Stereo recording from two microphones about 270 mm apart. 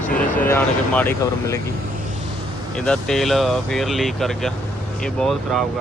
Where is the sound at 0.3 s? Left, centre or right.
Centre.